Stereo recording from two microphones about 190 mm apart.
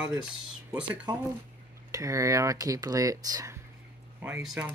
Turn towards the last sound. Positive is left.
turn(degrees=-5)  # may be behind; listen again after turning